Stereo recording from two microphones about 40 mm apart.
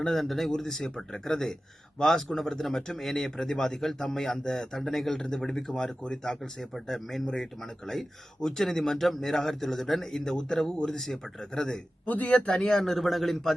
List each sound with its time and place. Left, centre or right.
0.1 s a man's voice: centre
12.0 s speech: left
12.4 s speech: left
12.7 s speech: centre